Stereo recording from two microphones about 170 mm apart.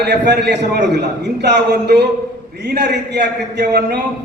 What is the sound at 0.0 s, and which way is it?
A man's voice, 75° right (ahead or behind).